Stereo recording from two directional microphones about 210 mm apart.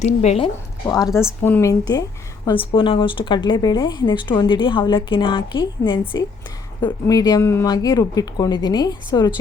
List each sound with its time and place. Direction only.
0.0 s a woman's voice: 30° left (ahead or behind)
0.9 s a woman's voice: 15° left (ahead or behind)